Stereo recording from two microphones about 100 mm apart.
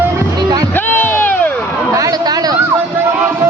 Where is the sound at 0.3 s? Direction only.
40° right (ahead or behind).